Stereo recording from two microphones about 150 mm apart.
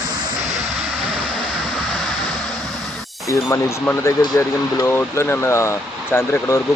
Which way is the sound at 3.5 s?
20° left (ahead or behind).